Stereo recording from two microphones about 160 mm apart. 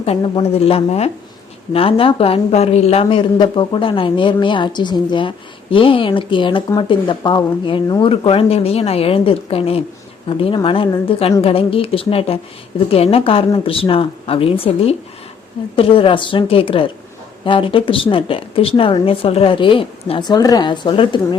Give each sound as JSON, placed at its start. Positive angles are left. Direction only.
{"t": 0.0, "sound": "speech", "side_deg": 40}